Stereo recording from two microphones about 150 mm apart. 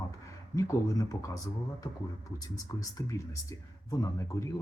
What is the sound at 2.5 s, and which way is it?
Speech, 25° left (ahead or behind).